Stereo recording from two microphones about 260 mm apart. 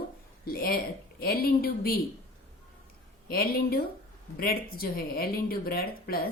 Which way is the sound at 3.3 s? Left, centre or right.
Left.